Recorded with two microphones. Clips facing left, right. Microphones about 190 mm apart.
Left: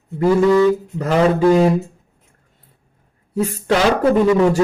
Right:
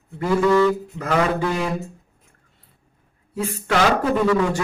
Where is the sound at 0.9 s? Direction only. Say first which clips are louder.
Left 5 dB; 40° left (ahead or behind).